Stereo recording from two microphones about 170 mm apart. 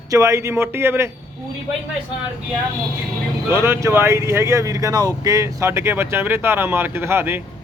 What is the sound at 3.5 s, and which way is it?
Speech, 15° right (ahead or behind).